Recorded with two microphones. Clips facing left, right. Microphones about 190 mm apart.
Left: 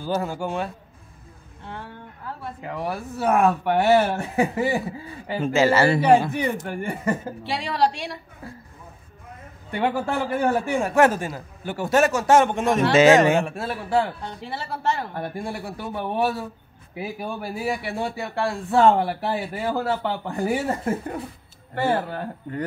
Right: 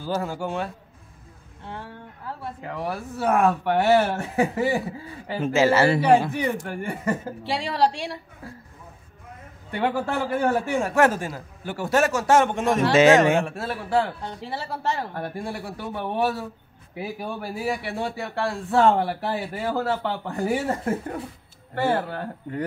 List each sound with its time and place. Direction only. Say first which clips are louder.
0.0 s a man's voice: left 1 dB; 15° left (ahead or behind)
1.7 s speech: even; 30° right (ahead or behind)
2.6 s a man's voice: left 2 dB; 15° left (ahead or behind)
5.4 s a man's voice: even; centre (ahead or behind)
6.3 s speech: left 1 dB; 20° left (ahead or behind)
7.4 s a woman's voice: even; 30° right (ahead or behind)
9.7 s a man's voice: left 1 dB; 15° left (ahead or behind)
12.9 s a man's voice: left 1 dB; centre (ahead or behind)
13.4 s a man's voice: left 1 dB; 15° left (ahead or behind)
14.2 s speech: even; 35° right (ahead or behind)
15.1 s a man's voice: left 1 dB; 15° left (ahead or behind)